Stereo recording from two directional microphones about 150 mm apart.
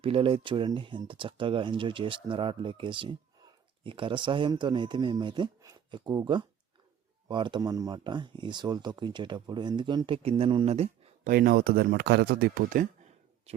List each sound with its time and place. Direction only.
0.0 s speech: 35° right (ahead or behind)
11.2 s speech: 70° right (ahead or behind)